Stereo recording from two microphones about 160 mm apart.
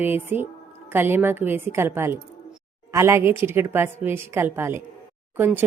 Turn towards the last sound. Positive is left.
turn(degrees=-10)  # may be behind; listen again after turning